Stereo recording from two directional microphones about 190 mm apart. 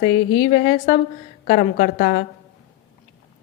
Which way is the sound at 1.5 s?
45° left (ahead or behind).